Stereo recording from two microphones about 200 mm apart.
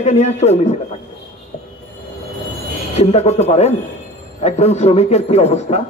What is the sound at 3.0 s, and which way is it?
A man's voice, 30° left (ahead or behind).